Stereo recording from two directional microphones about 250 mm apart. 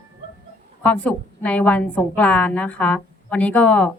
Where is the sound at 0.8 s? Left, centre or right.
Centre.